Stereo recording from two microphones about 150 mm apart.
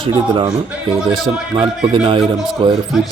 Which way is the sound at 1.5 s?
35° right (ahead or behind).